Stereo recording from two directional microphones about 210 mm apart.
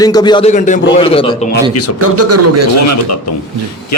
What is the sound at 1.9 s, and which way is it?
Speech, 90° right.